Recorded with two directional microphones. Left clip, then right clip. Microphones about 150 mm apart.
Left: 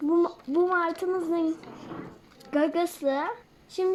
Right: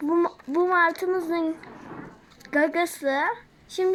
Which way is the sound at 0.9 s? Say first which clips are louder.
Right 2 dB; 5° left (ahead or behind).